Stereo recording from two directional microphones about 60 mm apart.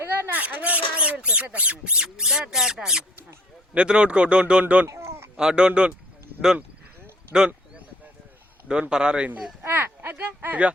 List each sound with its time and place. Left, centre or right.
0.3 s speech: right
4.9 s a sound: right
5.4 s speech: centre
7.3 s a sound: centre
8.6 s speech: centre
9.6 s speech: right